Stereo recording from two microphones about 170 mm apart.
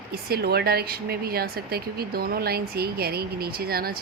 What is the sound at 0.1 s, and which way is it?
A woman's voice, 65° right (ahead or behind).